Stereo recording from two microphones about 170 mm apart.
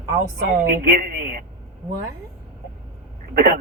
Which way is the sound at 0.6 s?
60° right (ahead or behind).